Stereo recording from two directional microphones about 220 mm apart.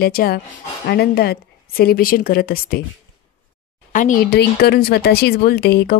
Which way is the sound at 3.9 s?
35° left (ahead or behind).